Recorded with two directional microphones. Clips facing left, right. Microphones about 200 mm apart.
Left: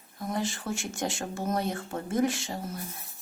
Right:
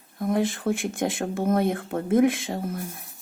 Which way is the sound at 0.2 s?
55° right (ahead or behind).